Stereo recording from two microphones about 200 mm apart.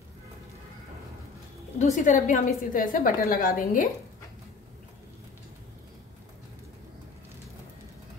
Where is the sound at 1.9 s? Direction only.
40° left (ahead or behind).